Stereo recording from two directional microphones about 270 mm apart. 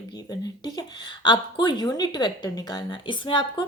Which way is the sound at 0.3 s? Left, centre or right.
Centre.